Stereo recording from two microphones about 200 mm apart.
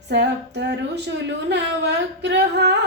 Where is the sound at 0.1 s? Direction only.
60° right (ahead or behind).